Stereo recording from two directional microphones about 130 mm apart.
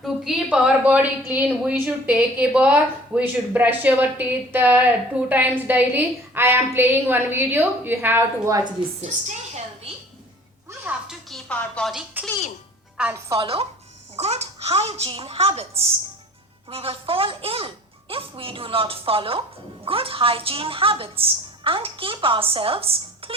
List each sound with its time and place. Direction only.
0.0 s a woman's voice: centre (ahead or behind); by 8.6 s 20° right (ahead or behind)
9.0 s a woman's voice: 60° right (ahead or behind)
10.8 s music: centre (ahead or behind)
13.3 s a woman's voice: 45° right (ahead or behind)